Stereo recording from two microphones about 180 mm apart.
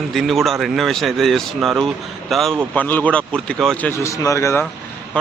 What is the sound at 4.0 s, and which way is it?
Speech, 15° left (ahead or behind).